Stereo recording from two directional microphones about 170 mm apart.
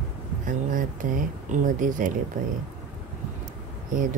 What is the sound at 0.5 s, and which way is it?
Speech, 50° right (ahead or behind).